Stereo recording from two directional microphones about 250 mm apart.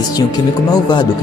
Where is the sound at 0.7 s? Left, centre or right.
Centre.